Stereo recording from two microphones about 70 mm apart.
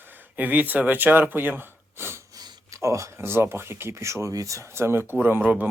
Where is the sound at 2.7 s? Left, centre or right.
Right.